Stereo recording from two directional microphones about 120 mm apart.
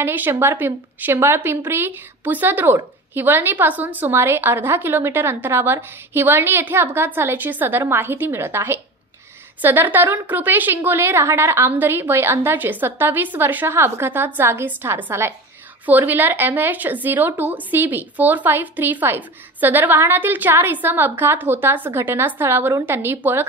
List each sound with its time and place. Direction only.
0.0 s a woman's voice: 20° right (ahead or behind)